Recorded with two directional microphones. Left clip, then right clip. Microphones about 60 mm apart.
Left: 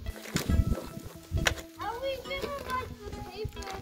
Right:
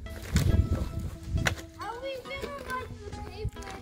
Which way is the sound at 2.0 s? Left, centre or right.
Right.